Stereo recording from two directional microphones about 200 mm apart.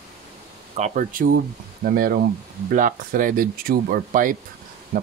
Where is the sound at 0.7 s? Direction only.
35° right (ahead or behind).